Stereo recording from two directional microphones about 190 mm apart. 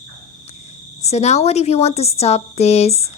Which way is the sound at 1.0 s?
35° left (ahead or behind).